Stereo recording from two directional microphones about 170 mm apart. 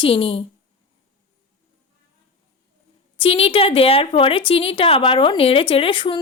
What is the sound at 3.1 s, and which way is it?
A woman's voice, 35° left (ahead or behind).